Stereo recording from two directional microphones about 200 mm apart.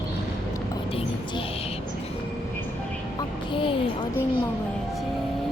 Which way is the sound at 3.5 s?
25° left (ahead or behind).